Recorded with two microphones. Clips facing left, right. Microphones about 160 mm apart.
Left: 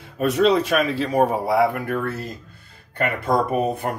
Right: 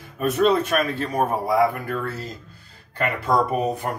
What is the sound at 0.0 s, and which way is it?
A man's voice, 70° left (ahead or behind).